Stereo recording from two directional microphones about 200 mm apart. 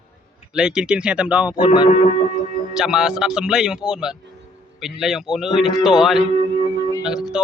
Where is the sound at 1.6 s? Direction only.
25° left (ahead or behind).